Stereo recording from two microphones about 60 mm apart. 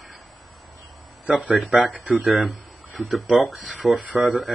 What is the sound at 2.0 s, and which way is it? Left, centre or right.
Speech, right.